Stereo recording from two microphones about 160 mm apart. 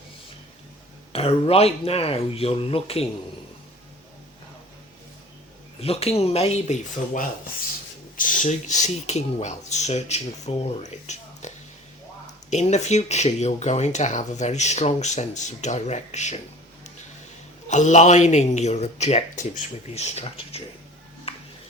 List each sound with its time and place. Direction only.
1.1 s speech: 40° left (ahead or behind)
5.8 s speech: 40° left (ahead or behind)
17.7 s speech: 50° left (ahead or behind)
21.3 s music: 40° left (ahead or behind)